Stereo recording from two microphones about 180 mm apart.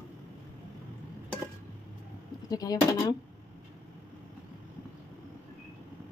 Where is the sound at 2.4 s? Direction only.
20° left (ahead or behind).